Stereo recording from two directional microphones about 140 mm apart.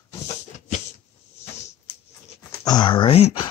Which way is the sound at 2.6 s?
30° left (ahead or behind).